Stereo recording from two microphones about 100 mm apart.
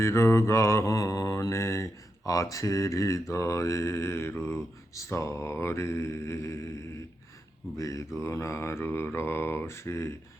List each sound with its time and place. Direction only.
0.0 s mantra: 25° left (ahead or behind)
7.8 s speech: 30° left (ahead or behind)
8.2 s mantra: 25° left (ahead or behind)